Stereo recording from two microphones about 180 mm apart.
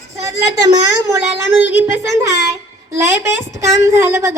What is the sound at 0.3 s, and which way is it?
A child's voice, 20° right (ahead or behind).